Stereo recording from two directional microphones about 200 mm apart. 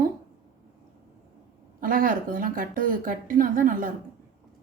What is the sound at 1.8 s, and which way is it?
Speech, 45° right (ahead or behind).